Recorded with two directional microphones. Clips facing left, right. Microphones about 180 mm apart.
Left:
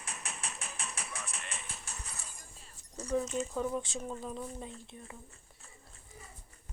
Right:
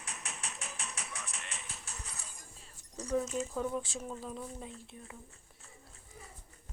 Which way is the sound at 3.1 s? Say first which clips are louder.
Left 1 dB; 5° right (ahead or behind).